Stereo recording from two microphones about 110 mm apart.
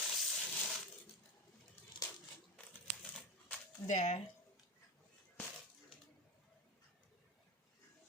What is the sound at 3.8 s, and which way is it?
Speech, 90° left.